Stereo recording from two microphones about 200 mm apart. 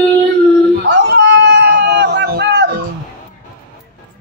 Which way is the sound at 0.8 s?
60° right (ahead or behind).